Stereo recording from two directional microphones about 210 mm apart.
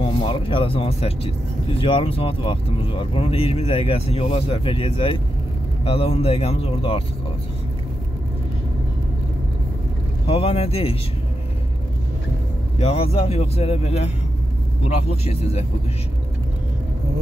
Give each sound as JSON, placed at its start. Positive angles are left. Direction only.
{"t": 0.0, "sound": "speech", "side_deg": 25}
{"t": 10.2, "sound": "speech", "side_deg": 25}
{"t": 12.7, "sound": "speech", "side_deg": 30}